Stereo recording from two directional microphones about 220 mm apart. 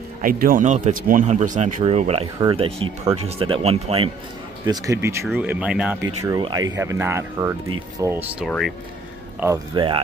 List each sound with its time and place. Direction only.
0.2 s speech: 40° right (ahead or behind)
4.6 s speech: 15° right (ahead or behind)
5.2 s speech: 5° right (ahead or behind)
6.3 s speech: 20° right (ahead or behind)
8.5 s speech: centre (ahead or behind)
9.4 s speech: 15° right (ahead or behind)